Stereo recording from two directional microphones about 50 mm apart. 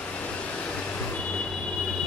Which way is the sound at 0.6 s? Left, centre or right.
Left.